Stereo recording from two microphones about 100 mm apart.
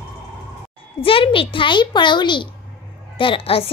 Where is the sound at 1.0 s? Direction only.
65° left (ahead or behind).